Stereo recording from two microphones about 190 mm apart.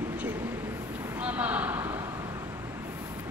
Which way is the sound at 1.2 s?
10° right (ahead or behind).